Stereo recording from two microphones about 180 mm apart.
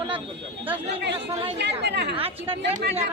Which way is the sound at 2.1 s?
30° right (ahead or behind).